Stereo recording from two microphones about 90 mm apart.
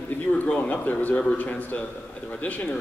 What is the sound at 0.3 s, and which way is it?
A man's voice, 15° left (ahead or behind).